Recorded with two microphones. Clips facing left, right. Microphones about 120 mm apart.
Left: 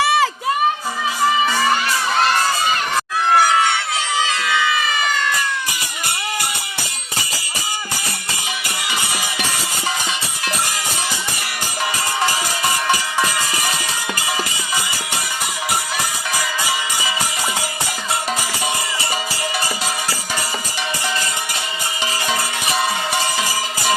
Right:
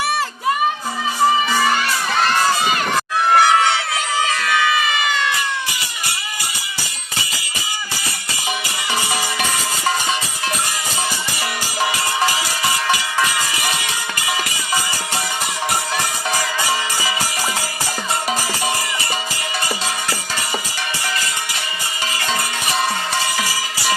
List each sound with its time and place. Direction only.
0.0 s music: 90° left
23.1 s music: 15° left (ahead or behind)